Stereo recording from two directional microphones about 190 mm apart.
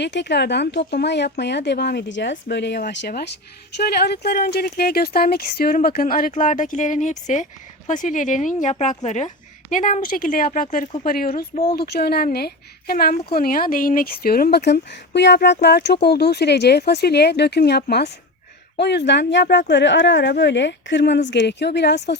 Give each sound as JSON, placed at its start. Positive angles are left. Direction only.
{"t": 0.0, "sound": "speech", "side_deg": 65}